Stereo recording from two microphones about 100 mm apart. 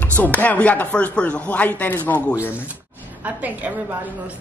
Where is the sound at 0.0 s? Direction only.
15° left (ahead or behind).